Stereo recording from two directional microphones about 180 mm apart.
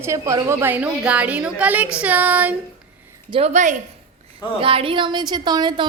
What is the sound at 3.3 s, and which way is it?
A woman's voice, 35° right (ahead or behind).